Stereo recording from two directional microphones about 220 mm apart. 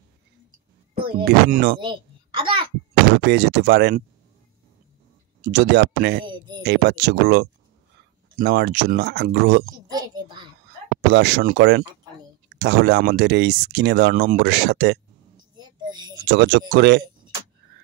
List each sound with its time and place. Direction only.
0.9 s music: 20° right (ahead or behind)
1.2 s speech: 45° right (ahead or behind)
1.8 s babbling: 20° right (ahead or behind)
2.9 s speech: 45° right (ahead or behind)
5.4 s speech: 45° right (ahead or behind)
6.2 s a sound: 20° right (ahead or behind)
6.6 s speech: 50° right (ahead or behind)
9.8 s a child's voice: 20° right (ahead or behind)
11.1 s speech: 50° right (ahead or behind)
15.5 s child singing: 20° right (ahead or behind)
16.3 s speech: 45° right (ahead or behind)